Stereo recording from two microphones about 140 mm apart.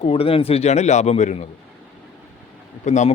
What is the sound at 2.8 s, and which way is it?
Speech, 55° left (ahead or behind).